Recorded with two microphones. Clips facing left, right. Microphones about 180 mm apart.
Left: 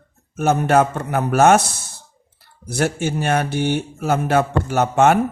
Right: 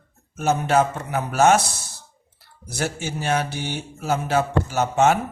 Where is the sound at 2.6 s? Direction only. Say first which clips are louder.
Left 7 dB; 60° left (ahead or behind).